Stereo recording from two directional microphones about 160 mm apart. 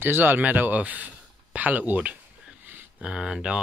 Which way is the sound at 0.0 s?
15° right (ahead or behind).